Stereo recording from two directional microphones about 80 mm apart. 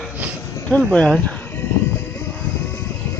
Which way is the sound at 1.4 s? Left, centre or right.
Left.